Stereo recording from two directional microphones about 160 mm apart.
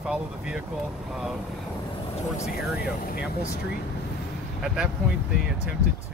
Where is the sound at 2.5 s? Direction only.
70° left (ahead or behind).